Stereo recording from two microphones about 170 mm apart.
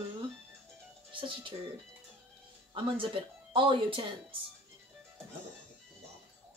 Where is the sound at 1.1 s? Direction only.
30° right (ahead or behind).